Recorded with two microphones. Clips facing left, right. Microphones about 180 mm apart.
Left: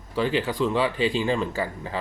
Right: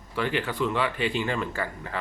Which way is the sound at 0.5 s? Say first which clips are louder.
Left 3 dB; 30° left (ahead or behind).